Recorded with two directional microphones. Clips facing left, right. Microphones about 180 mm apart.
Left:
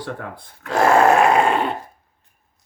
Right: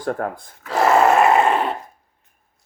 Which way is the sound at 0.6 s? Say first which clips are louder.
Left 1 dB; centre (ahead or behind).